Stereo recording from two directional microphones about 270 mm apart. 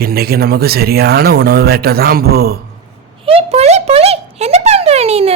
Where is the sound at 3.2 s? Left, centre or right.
Right.